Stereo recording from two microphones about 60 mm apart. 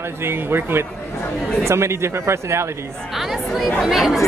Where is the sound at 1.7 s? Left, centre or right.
Right.